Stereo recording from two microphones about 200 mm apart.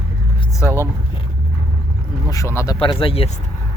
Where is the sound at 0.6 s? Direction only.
10° left (ahead or behind).